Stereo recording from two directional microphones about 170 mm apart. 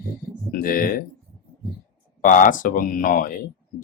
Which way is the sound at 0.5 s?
60° left (ahead or behind).